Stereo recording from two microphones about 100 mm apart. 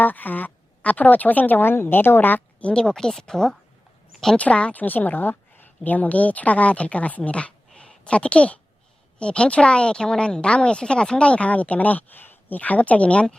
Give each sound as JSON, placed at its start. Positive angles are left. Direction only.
{"t": 0.0, "sound": "a woman's voice", "side_deg": 15}